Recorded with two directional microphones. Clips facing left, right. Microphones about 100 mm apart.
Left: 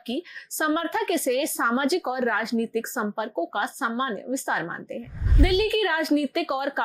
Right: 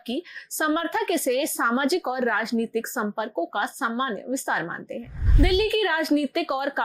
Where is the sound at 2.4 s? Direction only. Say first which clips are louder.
Even; 10° right (ahead or behind).